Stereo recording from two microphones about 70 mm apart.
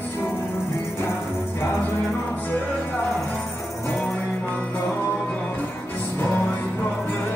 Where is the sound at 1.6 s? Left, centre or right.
Left.